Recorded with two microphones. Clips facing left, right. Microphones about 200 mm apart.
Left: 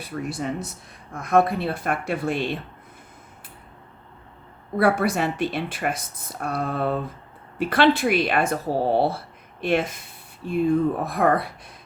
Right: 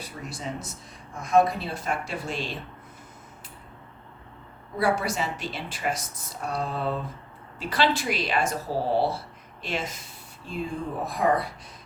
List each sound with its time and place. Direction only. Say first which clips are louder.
0.0 s speech: left 7 dB; 60° left (ahead or behind)
4.8 s speech: left 5 dB; 55° left (ahead or behind)